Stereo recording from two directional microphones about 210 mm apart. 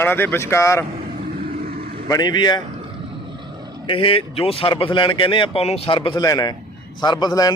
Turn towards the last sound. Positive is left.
turn(degrees=20)  # may be behind; listen again after turning